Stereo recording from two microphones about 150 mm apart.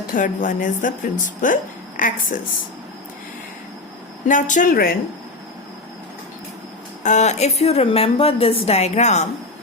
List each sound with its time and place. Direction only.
0.1 s speech: 60° left (ahead or behind)
4.3 s speech: 60° left (ahead or behind); by 4.9 s 80° left
7.0 s a woman's voice: 50° left (ahead or behind)